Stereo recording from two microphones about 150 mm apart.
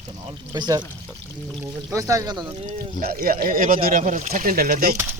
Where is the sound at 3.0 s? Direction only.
80° right.